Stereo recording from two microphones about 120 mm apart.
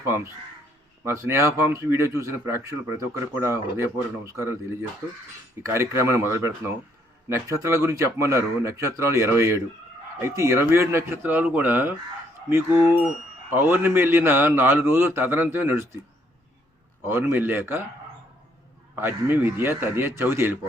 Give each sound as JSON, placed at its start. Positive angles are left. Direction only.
{"t": 0.1, "sound": "speech", "side_deg": -20}
{"t": 5.6, "sound": "a man's voice", "side_deg": -20}
{"t": 17.1, "sound": "a man's voice", "side_deg": -20}
{"t": 18.9, "sound": "speech", "side_deg": -15}